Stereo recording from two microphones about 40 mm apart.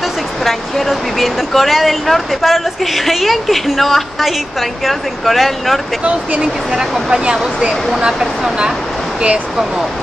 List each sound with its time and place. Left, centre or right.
0.4 s speech: centre
6.0 s speech: right
6.7 s speech: centre